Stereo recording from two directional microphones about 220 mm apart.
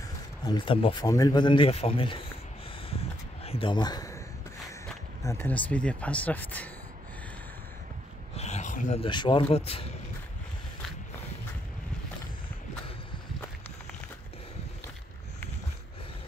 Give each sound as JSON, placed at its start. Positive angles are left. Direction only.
{"t": 0.5, "sound": "speech", "side_deg": 20}
{"t": 2.9, "sound": "a sound", "side_deg": 25}
{"t": 5.2, "sound": "speech", "side_deg": 10}
{"t": 8.4, "sound": "speech", "side_deg": 30}